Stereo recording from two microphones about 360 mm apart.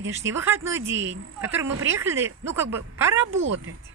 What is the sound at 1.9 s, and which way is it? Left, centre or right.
Speech, centre.